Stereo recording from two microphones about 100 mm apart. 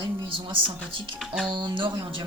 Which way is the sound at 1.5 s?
50° right (ahead or behind).